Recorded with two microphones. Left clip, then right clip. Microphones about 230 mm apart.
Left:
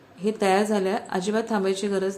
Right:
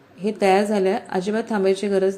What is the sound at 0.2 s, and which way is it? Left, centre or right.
A woman's voice, centre.